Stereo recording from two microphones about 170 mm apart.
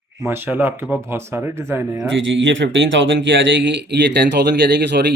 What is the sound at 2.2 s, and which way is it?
Speech, 90° right.